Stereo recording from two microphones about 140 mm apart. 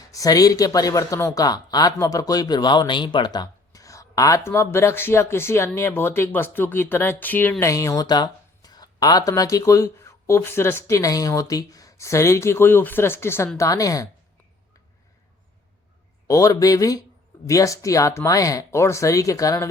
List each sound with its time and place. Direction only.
0.1 s speech: 25° left (ahead or behind)
16.2 s speech: 25° left (ahead or behind)